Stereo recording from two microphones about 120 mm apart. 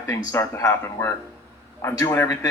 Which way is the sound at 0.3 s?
25° left (ahead or behind).